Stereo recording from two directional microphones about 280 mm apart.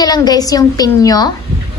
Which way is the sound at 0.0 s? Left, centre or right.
Centre.